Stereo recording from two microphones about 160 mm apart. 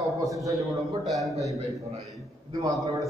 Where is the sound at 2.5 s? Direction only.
20° right (ahead or behind).